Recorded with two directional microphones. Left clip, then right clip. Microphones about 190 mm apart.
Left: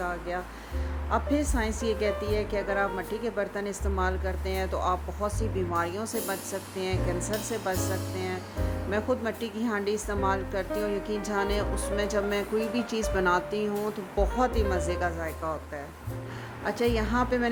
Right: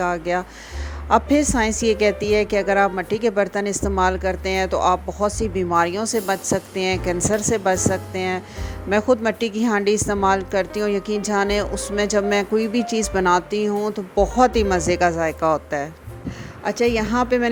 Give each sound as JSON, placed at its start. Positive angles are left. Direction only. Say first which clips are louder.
{"t": 0.0, "sound": "a woman's voice", "louder": "right 10 dB", "side_deg": -45}
{"t": 16.6, "sound": "a woman's voice", "louder": "right 8 dB", "side_deg": -35}